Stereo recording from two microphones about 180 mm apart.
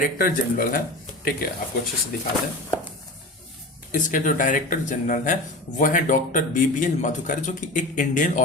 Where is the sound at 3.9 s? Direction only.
45° left (ahead or behind).